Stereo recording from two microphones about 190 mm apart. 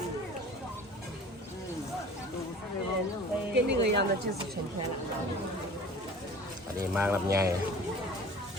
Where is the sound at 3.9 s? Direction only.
60° right (ahead or behind).